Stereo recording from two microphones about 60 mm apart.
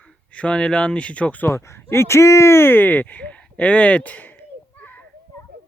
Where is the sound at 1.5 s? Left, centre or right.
Left.